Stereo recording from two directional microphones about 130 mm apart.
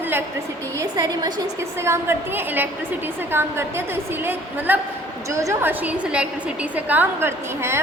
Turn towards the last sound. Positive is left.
turn(degrees=-20)  # may be behind; listen again after turning